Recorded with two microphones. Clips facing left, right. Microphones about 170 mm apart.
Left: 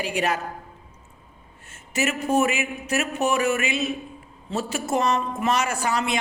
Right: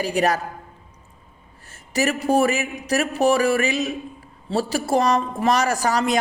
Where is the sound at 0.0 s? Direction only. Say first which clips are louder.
Right 4 dB; 40° right (ahead or behind).